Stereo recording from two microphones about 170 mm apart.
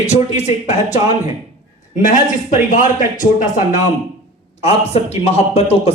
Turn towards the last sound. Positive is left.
turn(degrees=40)  # may be behind; listen again after turning